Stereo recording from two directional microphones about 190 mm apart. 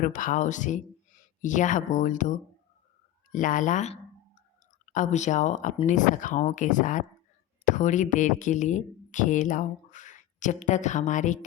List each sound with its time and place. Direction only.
0.0 s speech: 45° left (ahead or behind)